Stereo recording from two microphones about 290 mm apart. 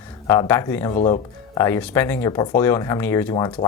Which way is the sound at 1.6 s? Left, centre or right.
Centre.